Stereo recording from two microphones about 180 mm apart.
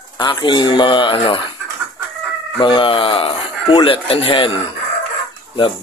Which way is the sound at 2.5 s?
30° left (ahead or behind).